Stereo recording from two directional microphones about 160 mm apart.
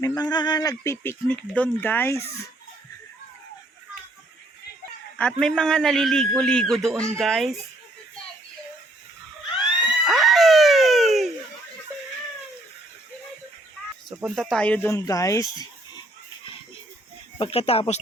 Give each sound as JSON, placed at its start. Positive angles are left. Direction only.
{"t": 0.0, "sound": "speech", "side_deg": 25}
{"t": 5.1, "sound": "a man's voice", "side_deg": 5}
{"t": 10.0, "sound": "music", "side_deg": 0}
{"t": 14.2, "sound": "a man's voice", "side_deg": 0}
{"t": 14.8, "sound": "speech", "side_deg": 20}
{"t": 17.3, "sound": "speech", "side_deg": 35}